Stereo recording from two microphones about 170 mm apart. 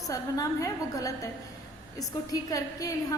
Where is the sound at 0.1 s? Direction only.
20° left (ahead or behind).